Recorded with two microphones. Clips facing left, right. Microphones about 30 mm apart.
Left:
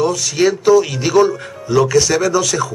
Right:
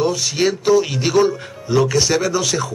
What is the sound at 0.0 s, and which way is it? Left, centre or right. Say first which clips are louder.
Speech: left 3 dB; right.